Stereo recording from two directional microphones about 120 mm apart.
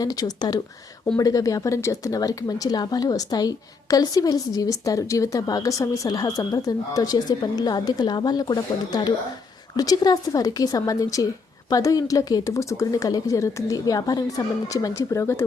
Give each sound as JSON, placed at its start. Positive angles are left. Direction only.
{"t": 0.0, "sound": "a woman's voice", "side_deg": 30}